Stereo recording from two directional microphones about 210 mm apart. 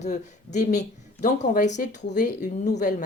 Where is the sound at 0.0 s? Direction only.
35° left (ahead or behind).